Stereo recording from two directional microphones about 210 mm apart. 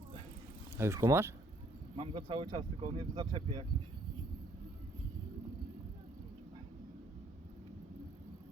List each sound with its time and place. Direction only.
0.8 s speech: 15° right (ahead or behind)
2.0 s speech: 25° right (ahead or behind)